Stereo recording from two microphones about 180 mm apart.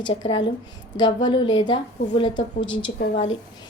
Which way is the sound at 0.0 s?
25° left (ahead or behind).